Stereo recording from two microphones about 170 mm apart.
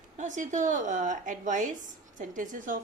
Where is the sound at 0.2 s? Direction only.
45° right (ahead or behind).